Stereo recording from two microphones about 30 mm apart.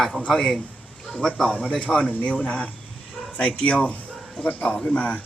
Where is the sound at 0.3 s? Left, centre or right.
Left.